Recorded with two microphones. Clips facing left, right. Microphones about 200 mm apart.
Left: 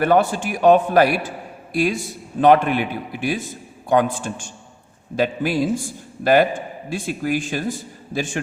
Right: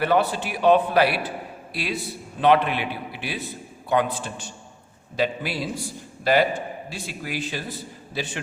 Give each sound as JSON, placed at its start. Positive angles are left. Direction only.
{"t": 0.0, "sound": "a man's voice", "side_deg": 45}